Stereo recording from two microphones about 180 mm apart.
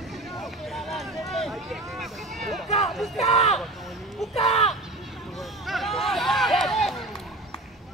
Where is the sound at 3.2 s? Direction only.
35° left (ahead or behind).